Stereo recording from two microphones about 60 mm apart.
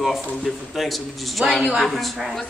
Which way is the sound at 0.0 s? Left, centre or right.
Centre.